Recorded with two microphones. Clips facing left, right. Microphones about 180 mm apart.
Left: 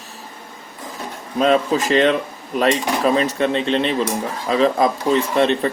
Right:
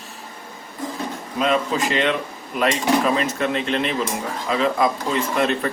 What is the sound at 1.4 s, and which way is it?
Speech, 40° left (ahead or behind).